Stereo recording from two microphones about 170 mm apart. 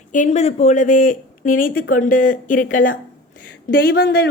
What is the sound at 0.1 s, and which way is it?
Speech, 45° left (ahead or behind).